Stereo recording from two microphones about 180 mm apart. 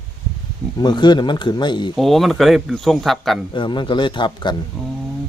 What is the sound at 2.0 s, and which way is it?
Speech, centre (ahead or behind).